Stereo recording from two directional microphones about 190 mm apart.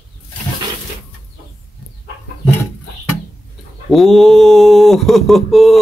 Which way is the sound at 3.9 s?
Centre (ahead or behind).